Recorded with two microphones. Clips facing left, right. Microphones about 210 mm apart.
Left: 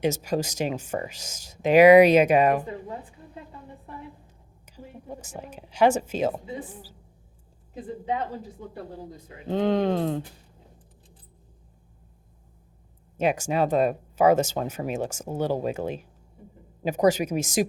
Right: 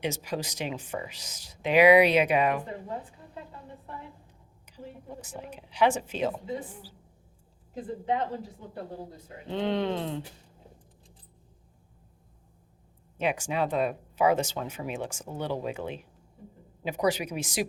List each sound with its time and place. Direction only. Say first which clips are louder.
0.0 s speech: left 7 dB; 45° left (ahead or behind)
5.2 s speech: left 2 dB; 45° left (ahead or behind)
9.5 s speech: left 5 dB; 45° left (ahead or behind)
13.1 s speech: left 5 dB; 45° left (ahead or behind)